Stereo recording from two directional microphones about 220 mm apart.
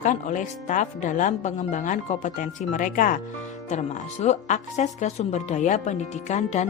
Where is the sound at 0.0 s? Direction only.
35° left (ahead or behind).